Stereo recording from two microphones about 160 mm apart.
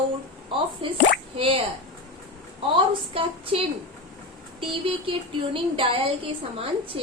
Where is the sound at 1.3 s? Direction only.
35° right (ahead or behind).